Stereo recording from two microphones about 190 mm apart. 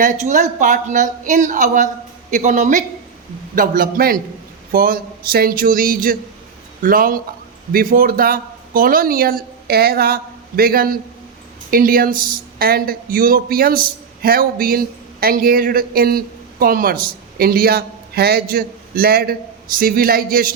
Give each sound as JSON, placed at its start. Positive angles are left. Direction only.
{"t": 0.0, "sound": "speech", "side_deg": -40}